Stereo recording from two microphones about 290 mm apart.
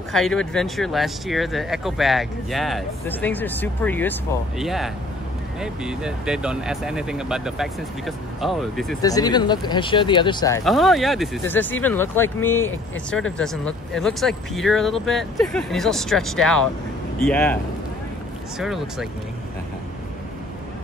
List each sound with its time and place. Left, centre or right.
0.1 s speech: centre
9.0 s speech: centre
10.6 s speech: centre
18.6 s speech: centre